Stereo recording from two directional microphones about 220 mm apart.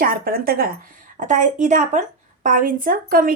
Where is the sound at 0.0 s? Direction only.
40° right (ahead or behind).